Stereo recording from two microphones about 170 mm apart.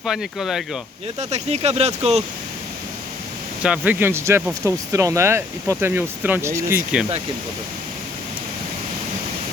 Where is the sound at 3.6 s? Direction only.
10° right (ahead or behind).